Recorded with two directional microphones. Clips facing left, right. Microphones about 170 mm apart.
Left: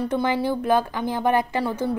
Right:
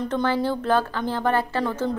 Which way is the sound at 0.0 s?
10° left (ahead or behind).